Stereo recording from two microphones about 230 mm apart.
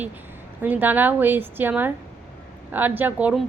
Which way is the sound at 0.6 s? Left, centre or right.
Centre.